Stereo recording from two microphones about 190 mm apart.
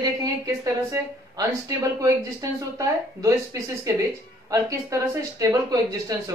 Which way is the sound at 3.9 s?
15° right (ahead or behind).